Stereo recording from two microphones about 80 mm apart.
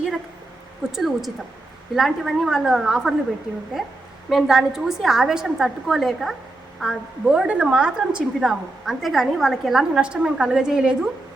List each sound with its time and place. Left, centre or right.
0.9 s a woman's voice: centre
4.3 s a woman's voice: centre